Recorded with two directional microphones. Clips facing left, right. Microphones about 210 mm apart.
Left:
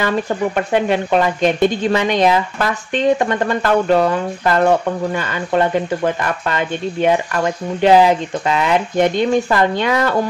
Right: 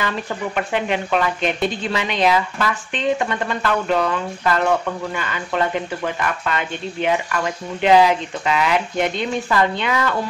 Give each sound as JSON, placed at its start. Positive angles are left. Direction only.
{"t": 0.6, "sound": "speech", "side_deg": 40}
{"t": 7.8, "sound": "speech", "side_deg": 40}